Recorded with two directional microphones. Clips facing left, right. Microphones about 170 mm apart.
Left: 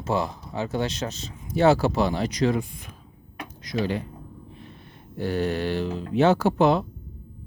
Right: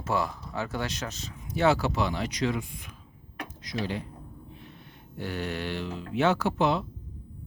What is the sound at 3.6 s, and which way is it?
Speech, 50° left (ahead or behind).